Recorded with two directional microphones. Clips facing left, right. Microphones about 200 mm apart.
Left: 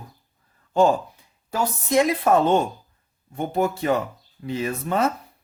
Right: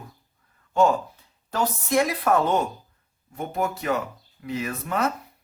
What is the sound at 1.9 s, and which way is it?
Speech, 20° left (ahead or behind).